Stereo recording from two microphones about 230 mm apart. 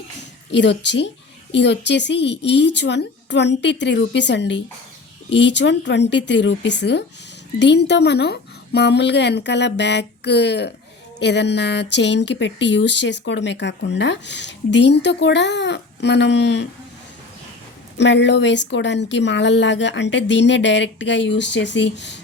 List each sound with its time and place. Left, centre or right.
0.5 s speech: left
17.9 s speech: left